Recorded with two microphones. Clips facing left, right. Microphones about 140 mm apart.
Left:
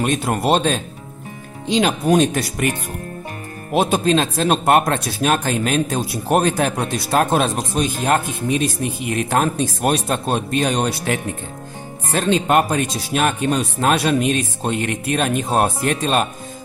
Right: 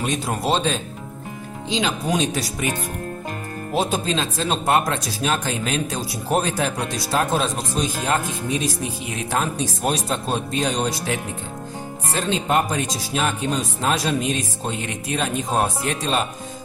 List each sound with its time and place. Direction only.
0.0 s speech: 55° left (ahead or behind)
3.7 s speech: 65° left (ahead or behind)